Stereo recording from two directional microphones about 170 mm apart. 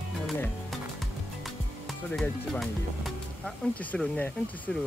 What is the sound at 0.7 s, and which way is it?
Speech, centre (ahead or behind).